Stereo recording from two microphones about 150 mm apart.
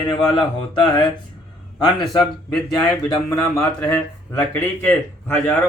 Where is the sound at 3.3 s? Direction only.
20° left (ahead or behind).